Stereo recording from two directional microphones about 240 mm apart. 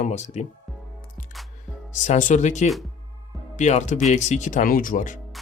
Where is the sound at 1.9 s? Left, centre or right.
Left.